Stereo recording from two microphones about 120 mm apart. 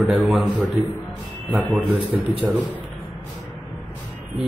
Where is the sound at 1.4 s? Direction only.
10° right (ahead or behind).